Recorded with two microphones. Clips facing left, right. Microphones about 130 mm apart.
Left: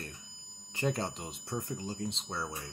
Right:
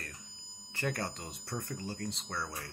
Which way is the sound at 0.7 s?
20° left (ahead or behind).